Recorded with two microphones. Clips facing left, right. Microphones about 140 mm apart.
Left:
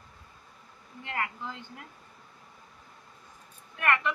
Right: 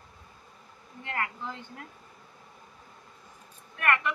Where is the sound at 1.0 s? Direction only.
15° left (ahead or behind).